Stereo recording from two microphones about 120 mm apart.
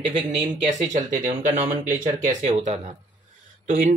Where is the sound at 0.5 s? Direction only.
90° right.